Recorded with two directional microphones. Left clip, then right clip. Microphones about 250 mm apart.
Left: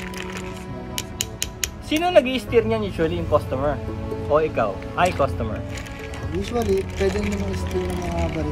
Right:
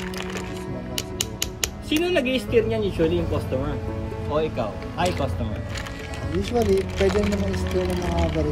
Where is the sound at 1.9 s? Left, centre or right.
Left.